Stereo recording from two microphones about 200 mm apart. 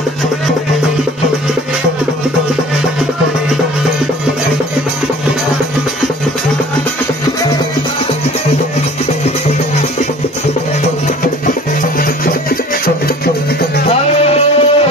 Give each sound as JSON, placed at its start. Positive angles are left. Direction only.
{"t": 13.8, "sound": "music", "side_deg": 30}